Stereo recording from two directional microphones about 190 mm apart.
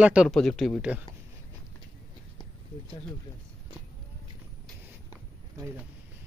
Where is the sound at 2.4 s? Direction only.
25° left (ahead or behind).